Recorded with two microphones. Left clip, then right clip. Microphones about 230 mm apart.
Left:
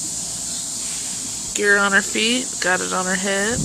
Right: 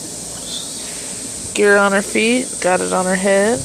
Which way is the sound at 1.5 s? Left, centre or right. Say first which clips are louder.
Right 3 dB; centre.